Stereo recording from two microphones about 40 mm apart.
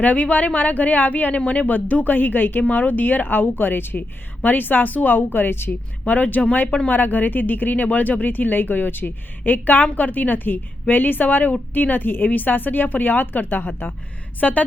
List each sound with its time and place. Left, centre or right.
0.0 s speech: left
6.1 s speech: left
14.4 s a woman's voice: left